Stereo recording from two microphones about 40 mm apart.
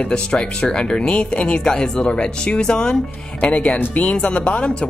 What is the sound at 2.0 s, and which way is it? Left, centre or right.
Speech, left.